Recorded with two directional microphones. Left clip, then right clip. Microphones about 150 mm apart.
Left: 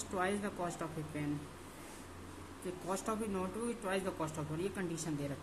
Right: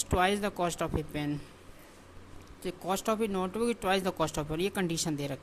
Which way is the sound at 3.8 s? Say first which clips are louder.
Right 7 dB; 65° right (ahead or behind).